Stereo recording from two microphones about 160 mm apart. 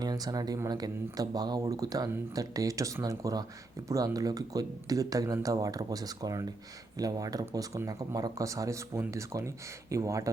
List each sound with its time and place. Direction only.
0.0 s speech: 25° right (ahead or behind)